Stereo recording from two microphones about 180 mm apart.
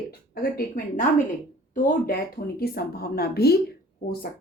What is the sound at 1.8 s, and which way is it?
A woman's voice, 55° left (ahead or behind).